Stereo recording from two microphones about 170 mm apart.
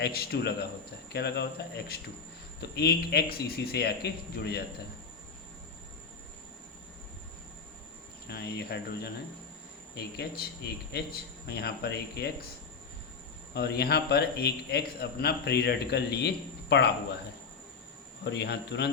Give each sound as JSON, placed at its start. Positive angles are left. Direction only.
{"t": 0.0, "sound": "speech", "side_deg": 70}
{"t": 8.3, "sound": "speech", "side_deg": 75}
{"t": 13.5, "sound": "speech", "side_deg": 70}
{"t": 18.3, "sound": "speech", "side_deg": 80}